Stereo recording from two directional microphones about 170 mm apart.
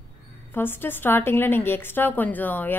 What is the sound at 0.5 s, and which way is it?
A woman's voice, 15° left (ahead or behind).